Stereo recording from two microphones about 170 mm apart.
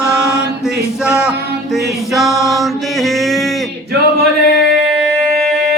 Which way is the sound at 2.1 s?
Centre (ahead or behind).